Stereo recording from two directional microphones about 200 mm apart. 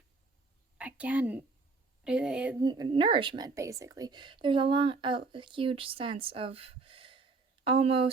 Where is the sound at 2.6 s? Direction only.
20° right (ahead or behind).